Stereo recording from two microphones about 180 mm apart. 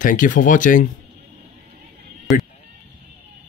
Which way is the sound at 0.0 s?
45° left (ahead or behind).